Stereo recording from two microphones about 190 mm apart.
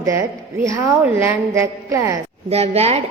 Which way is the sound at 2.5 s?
35° right (ahead or behind).